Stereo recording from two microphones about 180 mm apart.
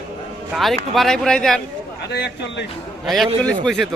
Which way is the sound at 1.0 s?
Centre (ahead or behind).